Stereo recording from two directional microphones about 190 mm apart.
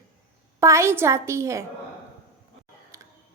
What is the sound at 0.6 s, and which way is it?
A woman's voice, 15° right (ahead or behind).